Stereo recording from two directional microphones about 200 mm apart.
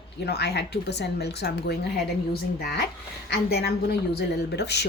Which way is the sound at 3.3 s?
55° left (ahead or behind).